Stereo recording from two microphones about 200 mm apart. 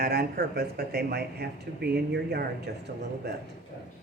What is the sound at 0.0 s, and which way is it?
Speech, 50° right (ahead or behind).